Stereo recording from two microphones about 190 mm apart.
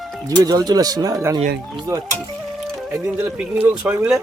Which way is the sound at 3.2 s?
10° right (ahead or behind).